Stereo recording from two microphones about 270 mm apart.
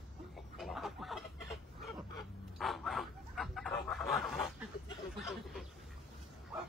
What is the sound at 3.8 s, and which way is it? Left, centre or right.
Fowl, centre.